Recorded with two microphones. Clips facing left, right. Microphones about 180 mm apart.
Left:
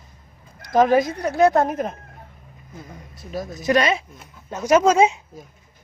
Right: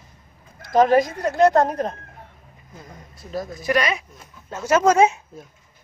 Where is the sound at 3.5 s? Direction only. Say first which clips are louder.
Left 3 dB; 25° left (ahead or behind).